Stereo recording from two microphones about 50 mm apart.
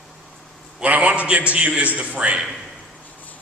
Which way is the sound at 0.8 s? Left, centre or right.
Right.